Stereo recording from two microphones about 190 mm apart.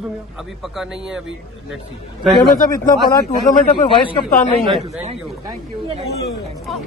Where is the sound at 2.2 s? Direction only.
Centre (ahead or behind).